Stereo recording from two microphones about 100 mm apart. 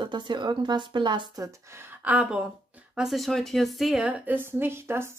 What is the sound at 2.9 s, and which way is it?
Speech, centre (ahead or behind).